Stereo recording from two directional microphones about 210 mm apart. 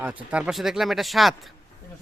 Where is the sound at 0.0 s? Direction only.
5° right (ahead or behind).